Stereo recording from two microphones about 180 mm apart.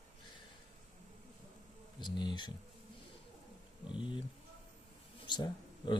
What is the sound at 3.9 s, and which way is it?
Speech, 25° left (ahead or behind).